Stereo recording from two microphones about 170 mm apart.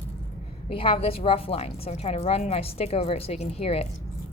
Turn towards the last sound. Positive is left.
turn(degrees=35)  # may be behind; listen again after turning